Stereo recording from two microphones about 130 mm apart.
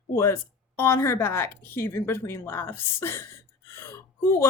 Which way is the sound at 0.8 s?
20° left (ahead or behind).